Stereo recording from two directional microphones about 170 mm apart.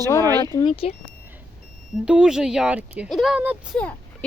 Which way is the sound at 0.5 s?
30° left (ahead or behind).